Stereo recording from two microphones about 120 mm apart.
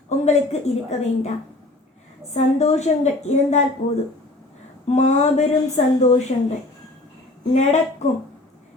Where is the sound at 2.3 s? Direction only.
65° left (ahead or behind).